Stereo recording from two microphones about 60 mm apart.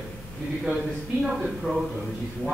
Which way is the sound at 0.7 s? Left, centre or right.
Centre.